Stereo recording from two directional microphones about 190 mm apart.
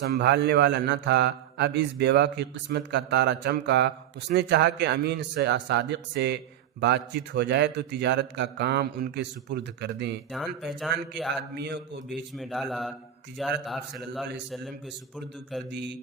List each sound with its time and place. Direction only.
0.0 s speech: 65° right (ahead or behind)
10.3 s speech: centre (ahead or behind)
11.5 s speech: 60° right (ahead or behind)
12.4 s speech: centre (ahead or behind)
15.7 s speech: 65° right (ahead or behind)